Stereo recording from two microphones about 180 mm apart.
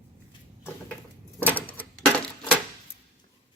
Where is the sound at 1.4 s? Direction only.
10° left (ahead or behind).